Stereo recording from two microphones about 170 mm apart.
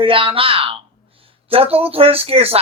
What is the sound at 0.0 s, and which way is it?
Speech, 30° right (ahead or behind).